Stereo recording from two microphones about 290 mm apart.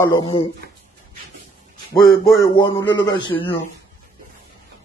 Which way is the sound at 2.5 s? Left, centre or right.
Centre.